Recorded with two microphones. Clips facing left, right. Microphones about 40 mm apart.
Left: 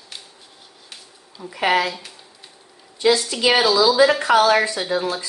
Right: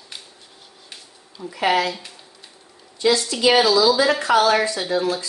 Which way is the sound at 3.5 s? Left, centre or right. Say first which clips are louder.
Left 1 dB; centre.